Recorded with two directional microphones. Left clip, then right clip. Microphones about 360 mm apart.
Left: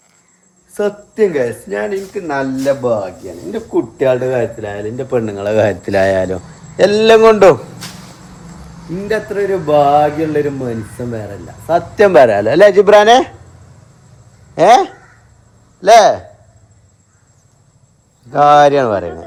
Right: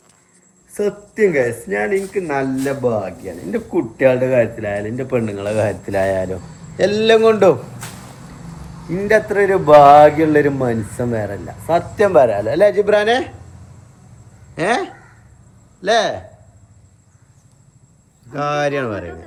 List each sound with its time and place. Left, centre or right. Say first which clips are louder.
0.7 s a woman's voice: left 3 dB; centre
3.8 s a man's voice: left 1 dB; centre; by 7.6 s left
9.0 s speech: right 2 dB; centre
11.9 s a man's voice: left 6 dB; left
14.5 s speech: left 11 dB; centre
18.3 s speech: left 12 dB; centre